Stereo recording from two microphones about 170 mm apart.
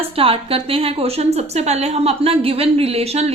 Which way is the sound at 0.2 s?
35° right (ahead or behind).